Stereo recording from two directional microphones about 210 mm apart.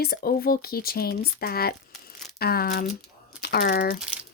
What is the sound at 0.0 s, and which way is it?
Speech, 45° left (ahead or behind).